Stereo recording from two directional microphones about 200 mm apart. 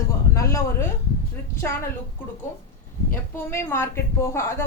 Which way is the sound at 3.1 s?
10° left (ahead or behind).